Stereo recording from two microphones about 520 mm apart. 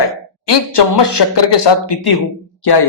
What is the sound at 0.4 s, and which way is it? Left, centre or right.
Speech, left.